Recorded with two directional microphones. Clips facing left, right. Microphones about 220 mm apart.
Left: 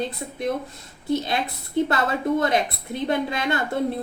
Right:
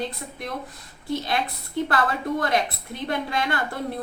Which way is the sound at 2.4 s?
25° left (ahead or behind).